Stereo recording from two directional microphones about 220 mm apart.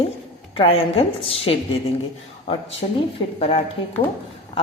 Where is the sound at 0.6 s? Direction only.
25° left (ahead or behind).